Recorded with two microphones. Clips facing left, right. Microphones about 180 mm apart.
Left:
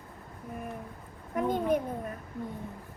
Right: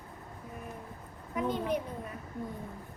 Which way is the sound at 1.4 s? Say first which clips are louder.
Left 4 dB; 50° left (ahead or behind).